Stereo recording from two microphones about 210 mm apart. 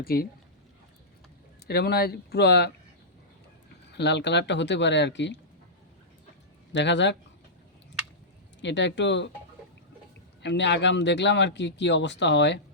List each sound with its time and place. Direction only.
0.0 s speech: 45° left (ahead or behind)
1.6 s speech: 50° left (ahead or behind)
3.9 s speech: 55° left (ahead or behind)
6.7 s speech: 60° left (ahead or behind)
8.6 s speech: 60° left (ahead or behind)
10.4 s speech: 55° left (ahead or behind)